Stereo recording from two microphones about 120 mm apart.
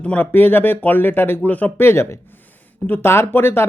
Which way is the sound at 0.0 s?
15° left (ahead or behind).